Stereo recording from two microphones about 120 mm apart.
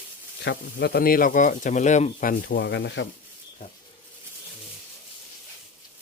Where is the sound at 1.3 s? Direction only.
90° left.